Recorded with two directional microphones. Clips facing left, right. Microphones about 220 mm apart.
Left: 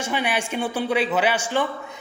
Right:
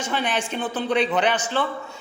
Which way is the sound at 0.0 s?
10° left (ahead or behind).